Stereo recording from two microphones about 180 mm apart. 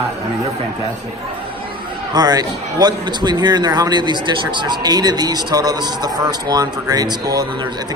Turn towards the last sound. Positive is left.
turn(degrees=-20)  # may be behind; listen again after turning